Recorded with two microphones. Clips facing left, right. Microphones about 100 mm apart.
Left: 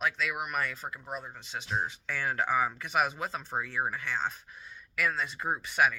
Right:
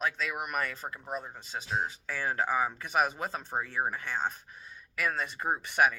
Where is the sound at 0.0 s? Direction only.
35° right (ahead or behind).